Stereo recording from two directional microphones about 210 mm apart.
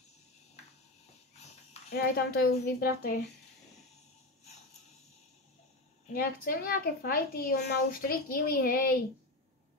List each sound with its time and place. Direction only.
1.3 s a sound: 30° left (ahead or behind)
1.9 s a woman's voice: 45° left (ahead or behind)
6.1 s a woman's voice: 45° left (ahead or behind)